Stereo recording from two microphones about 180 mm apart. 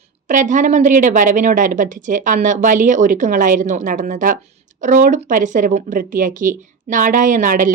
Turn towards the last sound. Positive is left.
turn(degrees=-45)  # may be behind; listen again after turning